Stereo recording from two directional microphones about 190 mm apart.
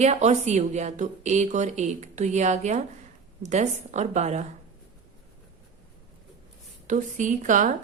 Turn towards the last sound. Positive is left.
turn(degrees=-40)  # may be behind; listen again after turning